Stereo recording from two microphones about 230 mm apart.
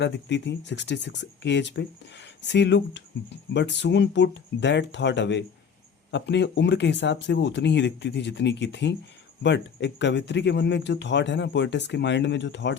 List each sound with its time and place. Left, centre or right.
0.0 s speech: left